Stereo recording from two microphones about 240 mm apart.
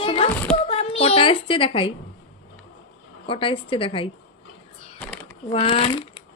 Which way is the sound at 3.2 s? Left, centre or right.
Left.